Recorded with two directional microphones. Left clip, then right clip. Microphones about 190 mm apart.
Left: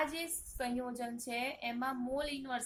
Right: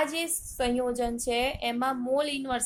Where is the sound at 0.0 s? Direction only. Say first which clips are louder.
Right 8 dB; 30° right (ahead or behind).